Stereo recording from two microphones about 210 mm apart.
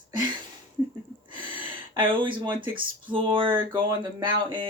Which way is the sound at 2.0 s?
25° right (ahead or behind).